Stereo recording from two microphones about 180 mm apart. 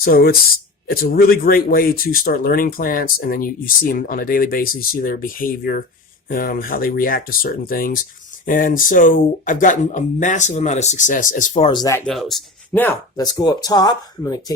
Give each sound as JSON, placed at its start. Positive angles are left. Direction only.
{"t": 0.0, "sound": "speech", "side_deg": 55}
{"t": 11.7, "sound": "speech", "side_deg": 20}
{"t": 12.0, "sound": "speech", "side_deg": 0}
{"t": 13.2, "sound": "speech", "side_deg": 25}